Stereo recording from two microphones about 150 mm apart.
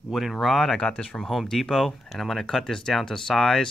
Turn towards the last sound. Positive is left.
turn(degrees=5)  # may be behind; listen again after turning